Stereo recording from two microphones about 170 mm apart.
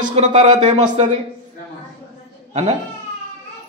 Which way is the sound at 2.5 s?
40° right (ahead or behind).